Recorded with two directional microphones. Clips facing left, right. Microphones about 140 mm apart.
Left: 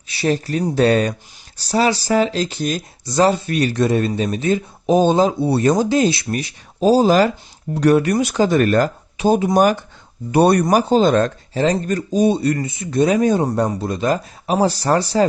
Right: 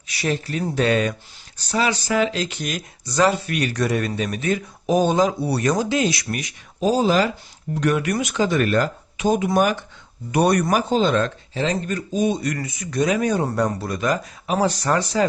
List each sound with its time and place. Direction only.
0.1 s speech: 35° left (ahead or behind)